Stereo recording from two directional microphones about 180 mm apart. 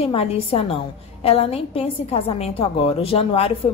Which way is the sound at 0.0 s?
35° left (ahead or behind).